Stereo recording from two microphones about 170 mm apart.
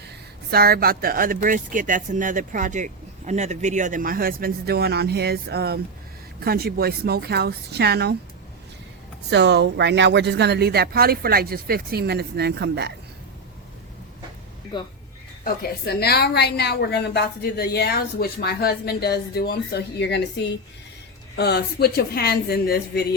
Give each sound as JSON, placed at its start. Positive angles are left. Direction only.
{"t": 0.5, "sound": "speech", "side_deg": -65}
{"t": 9.3, "sound": "speech", "side_deg": -85}
{"t": 14.7, "sound": "speech", "side_deg": 25}
{"t": 16.0, "sound": "a woman's voice", "side_deg": 70}
{"t": 21.3, "sound": "a woman's voice", "side_deg": 75}